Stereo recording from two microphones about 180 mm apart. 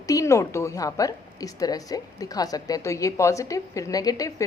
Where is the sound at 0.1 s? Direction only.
15° left (ahead or behind).